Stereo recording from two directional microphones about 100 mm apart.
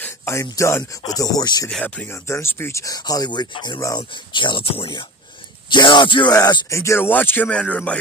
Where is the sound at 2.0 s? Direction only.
25° left (ahead or behind); by 4.9 s 65° left (ahead or behind).